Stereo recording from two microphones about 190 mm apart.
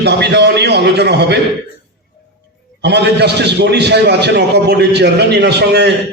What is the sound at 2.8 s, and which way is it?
A man's voice, 60° right (ahead or behind).